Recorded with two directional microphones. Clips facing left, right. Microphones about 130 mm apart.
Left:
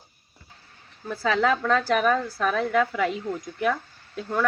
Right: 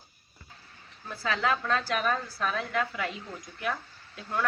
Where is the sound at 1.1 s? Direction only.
60° left (ahead or behind).